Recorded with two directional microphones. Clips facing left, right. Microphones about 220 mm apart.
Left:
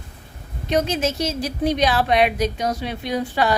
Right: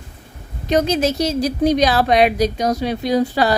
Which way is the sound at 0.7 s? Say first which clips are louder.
Right 4 dB; 40° right (ahead or behind).